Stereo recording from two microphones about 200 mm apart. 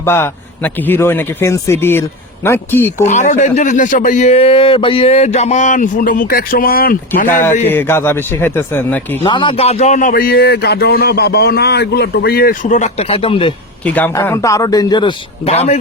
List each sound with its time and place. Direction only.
0.0 s speech: 10° left (ahead or behind)
3.0 s speech: 35° left (ahead or behind)
7.7 s speech: 10° left (ahead or behind)
9.2 s speech: 25° left (ahead or behind)
13.8 s speech: 10° left (ahead or behind); by 15.8 s 35° left (ahead or behind)